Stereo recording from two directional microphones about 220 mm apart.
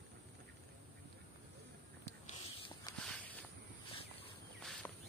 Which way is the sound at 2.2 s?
20° left (ahead or behind).